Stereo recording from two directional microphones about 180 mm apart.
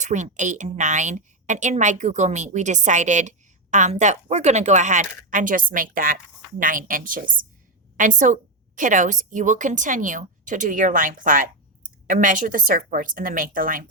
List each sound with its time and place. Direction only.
0.0 s a woman's voice: 40° right (ahead or behind)